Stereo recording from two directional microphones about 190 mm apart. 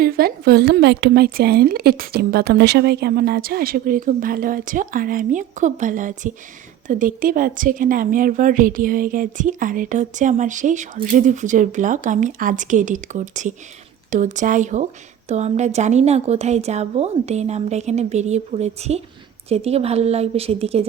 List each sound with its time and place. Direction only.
0.0 s a woman's voice: 50° right (ahead or behind); by 20.8 s 30° right (ahead or behind)